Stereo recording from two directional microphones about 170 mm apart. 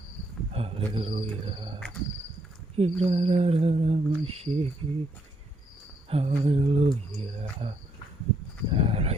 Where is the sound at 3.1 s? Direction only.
40° right (ahead or behind).